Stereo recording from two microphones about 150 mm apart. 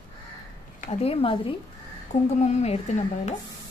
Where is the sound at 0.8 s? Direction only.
45° left (ahead or behind).